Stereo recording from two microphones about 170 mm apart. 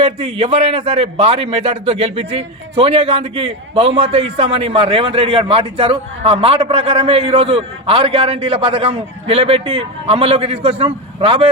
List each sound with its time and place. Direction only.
0.0 s a man's voice: 35° right (ahead or behind)